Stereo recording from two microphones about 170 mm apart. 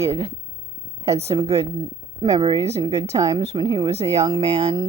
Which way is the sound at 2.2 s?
30° right (ahead or behind).